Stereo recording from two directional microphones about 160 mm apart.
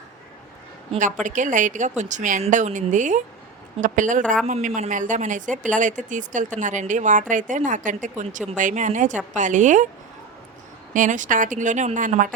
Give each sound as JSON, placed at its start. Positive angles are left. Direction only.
{"t": 1.2, "sound": "speech", "side_deg": -50}
{"t": 10.9, "sound": "speech", "side_deg": -55}